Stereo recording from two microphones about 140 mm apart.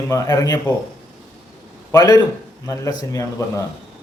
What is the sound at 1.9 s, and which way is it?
A man's voice, 25° left (ahead or behind).